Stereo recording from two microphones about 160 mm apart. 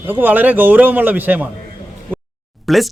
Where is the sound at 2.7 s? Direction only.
Centre (ahead or behind).